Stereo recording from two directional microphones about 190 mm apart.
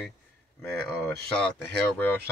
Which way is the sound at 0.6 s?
5° left (ahead or behind).